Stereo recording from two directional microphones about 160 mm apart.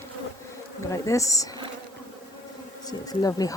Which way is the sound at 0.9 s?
20° left (ahead or behind).